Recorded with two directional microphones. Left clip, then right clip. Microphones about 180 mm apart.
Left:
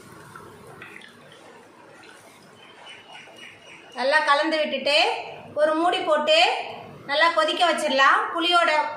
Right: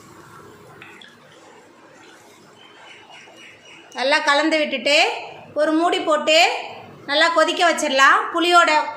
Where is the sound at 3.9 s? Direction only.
55° right (ahead or behind).